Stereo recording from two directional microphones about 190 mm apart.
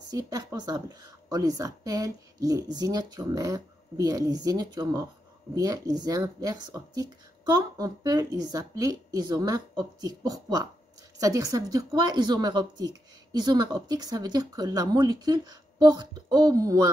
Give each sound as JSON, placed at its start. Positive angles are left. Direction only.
{"t": 0.1, "sound": "a woman's voice", "side_deg": -20}